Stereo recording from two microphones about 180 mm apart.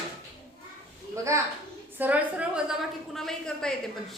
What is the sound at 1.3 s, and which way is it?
A woman's voice, 15° right (ahead or behind).